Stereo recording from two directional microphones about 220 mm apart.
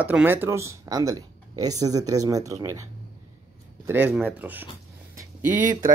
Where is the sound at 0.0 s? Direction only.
5° right (ahead or behind).